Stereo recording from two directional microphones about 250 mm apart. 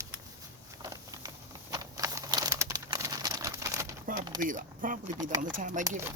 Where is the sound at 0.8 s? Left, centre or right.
Centre.